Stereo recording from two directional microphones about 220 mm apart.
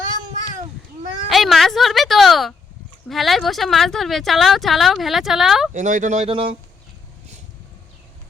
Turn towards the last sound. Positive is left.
turn(degrees=-25)  # may be behind; listen again after turning